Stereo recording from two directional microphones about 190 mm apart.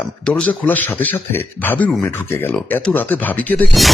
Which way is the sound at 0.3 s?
5° left (ahead or behind).